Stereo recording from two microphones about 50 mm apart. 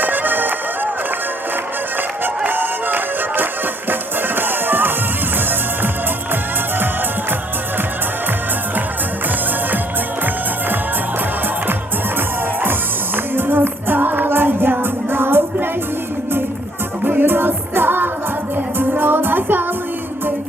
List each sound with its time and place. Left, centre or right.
0.0 s music: right
2.5 s music: right
13.3 s music: right
17.1 s music: right